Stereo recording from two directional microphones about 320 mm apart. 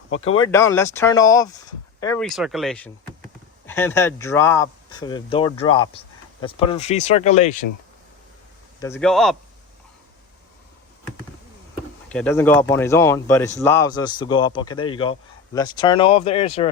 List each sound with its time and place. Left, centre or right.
0.4 s speech: centre
8.8 s speech: centre
12.0 s speech: centre